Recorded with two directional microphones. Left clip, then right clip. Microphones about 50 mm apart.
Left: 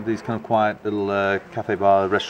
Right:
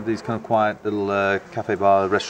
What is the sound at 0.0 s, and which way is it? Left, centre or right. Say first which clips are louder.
Speech: even; centre.